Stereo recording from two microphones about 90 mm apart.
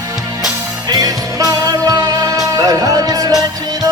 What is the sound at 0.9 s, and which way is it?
Music, 45° right (ahead or behind).